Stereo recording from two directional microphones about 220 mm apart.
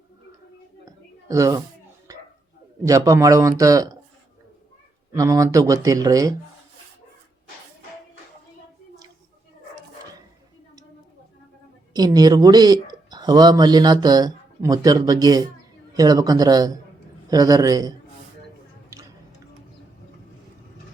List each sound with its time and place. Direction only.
1.3 s speech: 15° right (ahead or behind)
2.8 s speech: 15° right (ahead or behind)
5.1 s speech: 15° right (ahead or behind)
11.9 s speech: 15° right (ahead or behind)